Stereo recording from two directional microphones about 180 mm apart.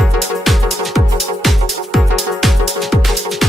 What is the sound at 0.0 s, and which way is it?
Music, centre (ahead or behind).